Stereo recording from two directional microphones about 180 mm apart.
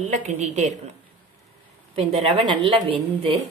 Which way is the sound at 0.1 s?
40° right (ahead or behind).